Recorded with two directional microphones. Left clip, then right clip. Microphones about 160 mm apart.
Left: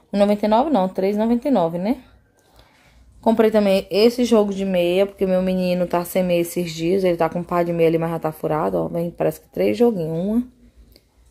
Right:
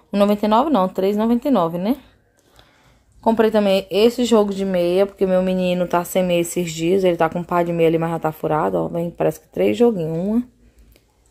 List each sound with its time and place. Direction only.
0.1 s speech: 15° right (ahead or behind)
3.3 s speech: centre (ahead or behind)